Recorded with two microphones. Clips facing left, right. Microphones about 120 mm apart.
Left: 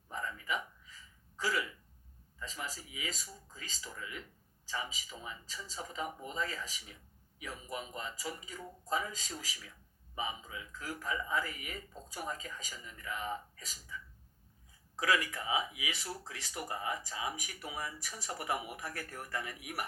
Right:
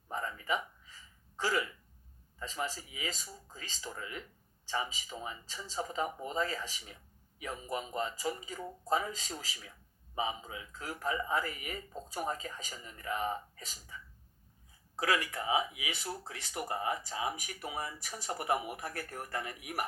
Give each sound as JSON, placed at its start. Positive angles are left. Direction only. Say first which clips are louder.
{"t": 0.1, "sound": "a sound", "louder": "right 3 dB", "side_deg": -35}
{"t": 1.4, "sound": "speech", "louder": "right 2 dB", "side_deg": -35}
{"t": 14.9, "sound": "speech", "louder": "even", "side_deg": -35}
{"t": 16.2, "sound": "speech", "louder": "right 3 dB", "side_deg": -45}